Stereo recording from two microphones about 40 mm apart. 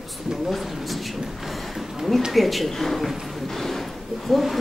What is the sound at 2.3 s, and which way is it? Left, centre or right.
Speech, centre.